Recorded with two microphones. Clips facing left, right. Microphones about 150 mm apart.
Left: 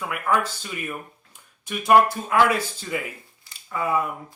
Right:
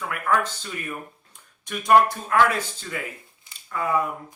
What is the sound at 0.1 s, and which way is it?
Speech, 10° left (ahead or behind).